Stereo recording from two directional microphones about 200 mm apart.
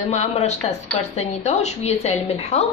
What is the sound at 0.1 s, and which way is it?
A woman's voice, 35° left (ahead or behind).